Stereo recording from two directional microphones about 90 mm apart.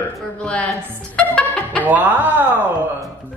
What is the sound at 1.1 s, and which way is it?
Music, 15° left (ahead or behind).